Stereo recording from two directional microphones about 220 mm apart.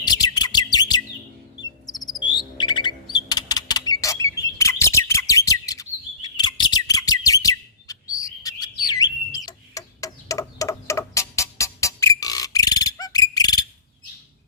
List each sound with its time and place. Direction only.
0.0 s bird: 20° left (ahead or behind)
1.6 s chirp: 15° left (ahead or behind)